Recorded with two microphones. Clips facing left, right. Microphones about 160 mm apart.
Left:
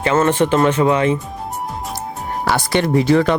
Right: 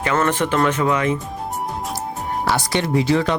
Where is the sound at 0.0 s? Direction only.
25° left (ahead or behind).